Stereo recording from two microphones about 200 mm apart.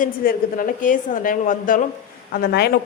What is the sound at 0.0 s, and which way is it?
A woman's voice, 45° left (ahead or behind).